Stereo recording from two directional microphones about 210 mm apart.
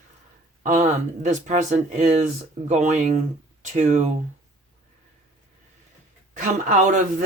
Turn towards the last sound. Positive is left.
turn(degrees=-40)  # may be behind; listen again after turning